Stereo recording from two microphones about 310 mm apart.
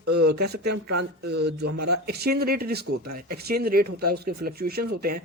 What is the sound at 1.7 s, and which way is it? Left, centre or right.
Speech, right.